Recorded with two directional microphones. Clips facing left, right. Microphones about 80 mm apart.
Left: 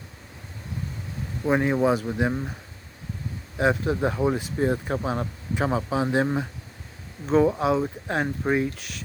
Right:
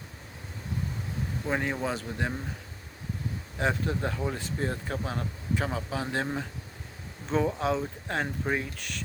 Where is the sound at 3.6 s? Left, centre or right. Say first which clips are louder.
Left 6 dB; centre.